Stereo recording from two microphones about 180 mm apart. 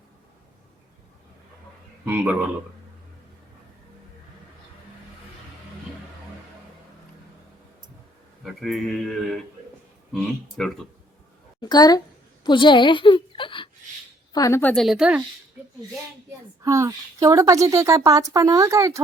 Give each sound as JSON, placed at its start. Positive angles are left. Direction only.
{"t": 2.0, "sound": "a woman's voice", "side_deg": -10}
{"t": 8.4, "sound": "speech", "side_deg": 0}
{"t": 11.6, "sound": "a sound", "side_deg": 20}
{"t": 14.3, "sound": "speech", "side_deg": 15}
{"t": 16.6, "sound": "a woman's voice", "side_deg": -15}